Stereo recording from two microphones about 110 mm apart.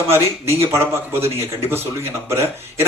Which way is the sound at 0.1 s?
25° right (ahead or behind).